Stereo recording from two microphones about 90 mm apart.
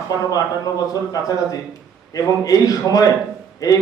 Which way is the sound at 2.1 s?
40° left (ahead or behind).